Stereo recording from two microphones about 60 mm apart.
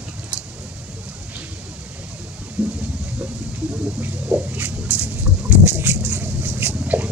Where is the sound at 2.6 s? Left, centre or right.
Right.